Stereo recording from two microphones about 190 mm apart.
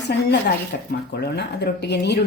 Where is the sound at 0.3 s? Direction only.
60° left (ahead or behind).